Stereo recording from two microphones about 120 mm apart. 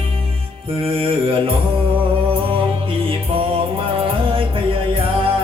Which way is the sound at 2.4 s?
45° right (ahead or behind).